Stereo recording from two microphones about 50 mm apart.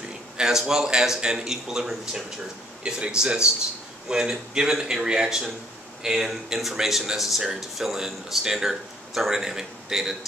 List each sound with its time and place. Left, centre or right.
0.4 s speech: centre